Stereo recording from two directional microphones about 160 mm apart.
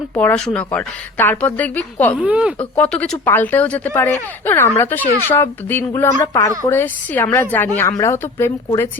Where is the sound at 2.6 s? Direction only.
10° left (ahead or behind).